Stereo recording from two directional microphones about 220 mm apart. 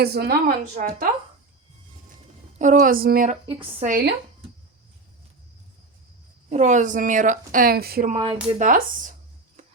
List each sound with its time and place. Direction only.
0.0 s a woman's voice: 45° right (ahead or behind)
2.6 s a woman's voice: 35° right (ahead or behind)
3.6 s speech: 25° right (ahead or behind)
6.5 s a woman's voice: 35° right (ahead or behind)
8.1 s a woman's voice: 30° right (ahead or behind)